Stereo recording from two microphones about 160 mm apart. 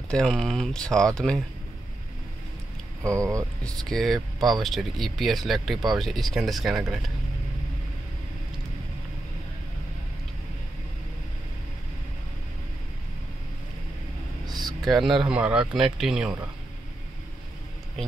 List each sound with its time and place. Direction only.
0.1 s speech: 5° left (ahead or behind)
3.0 s speech: 20° right (ahead or behind)
3.6 s speech: centre (ahead or behind)
14.4 s a sound: 25° right (ahead or behind)
14.9 s speech: centre (ahead or behind)